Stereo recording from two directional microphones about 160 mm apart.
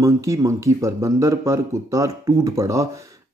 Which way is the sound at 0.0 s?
20° right (ahead or behind).